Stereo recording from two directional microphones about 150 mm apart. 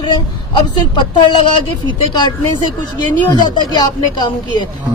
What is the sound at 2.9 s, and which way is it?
Speech, 30° left (ahead or behind).